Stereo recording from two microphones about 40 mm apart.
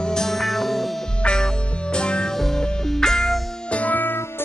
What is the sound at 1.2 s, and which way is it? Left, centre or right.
Music, centre.